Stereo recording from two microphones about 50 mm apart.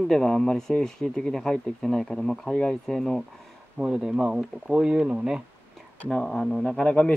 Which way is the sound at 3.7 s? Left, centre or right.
Centre.